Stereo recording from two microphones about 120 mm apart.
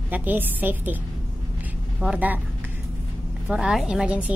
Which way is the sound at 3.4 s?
5° right (ahead or behind).